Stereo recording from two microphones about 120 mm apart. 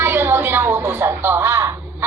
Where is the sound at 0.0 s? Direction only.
20° right (ahead or behind).